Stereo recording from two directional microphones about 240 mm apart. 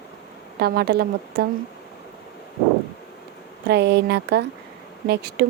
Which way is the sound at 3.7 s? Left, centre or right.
Right.